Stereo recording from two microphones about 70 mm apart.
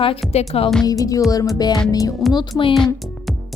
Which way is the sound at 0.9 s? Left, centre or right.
Left.